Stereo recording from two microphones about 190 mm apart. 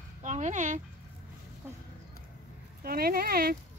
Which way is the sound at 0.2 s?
40° right (ahead or behind).